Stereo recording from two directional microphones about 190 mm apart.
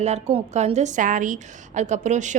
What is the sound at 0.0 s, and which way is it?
A woman's voice, 35° right (ahead or behind).